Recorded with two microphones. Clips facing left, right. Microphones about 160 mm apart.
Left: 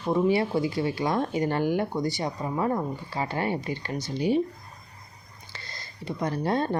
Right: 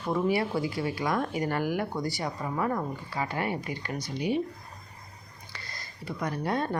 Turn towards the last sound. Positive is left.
turn(degrees=30)  # may be behind; listen again after turning